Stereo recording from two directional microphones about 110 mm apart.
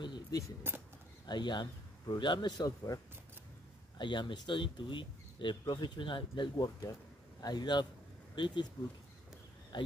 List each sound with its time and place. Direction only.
0.0 s a sound: 45° left (ahead or behind)
0.7 s speech: 20° right (ahead or behind)
1.2 s speech: 40° left (ahead or behind)
4.0 s a man's voice: 45° left (ahead or behind)